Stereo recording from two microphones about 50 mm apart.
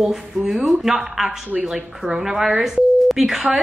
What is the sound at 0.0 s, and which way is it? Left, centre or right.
Speech, centre.